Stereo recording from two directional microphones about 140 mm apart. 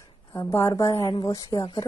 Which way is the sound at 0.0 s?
25° left (ahead or behind).